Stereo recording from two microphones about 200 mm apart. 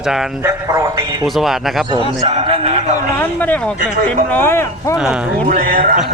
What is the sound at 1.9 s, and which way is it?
A man's voice, 25° right (ahead or behind).